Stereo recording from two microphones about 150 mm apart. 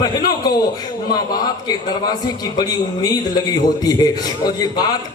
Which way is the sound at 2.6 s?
25° left (ahead or behind).